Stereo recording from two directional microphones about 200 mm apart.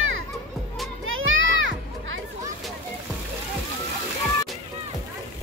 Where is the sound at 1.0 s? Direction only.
80° right.